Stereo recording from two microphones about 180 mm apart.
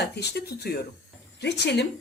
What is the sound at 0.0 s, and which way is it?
Speech, 65° left (ahead or behind).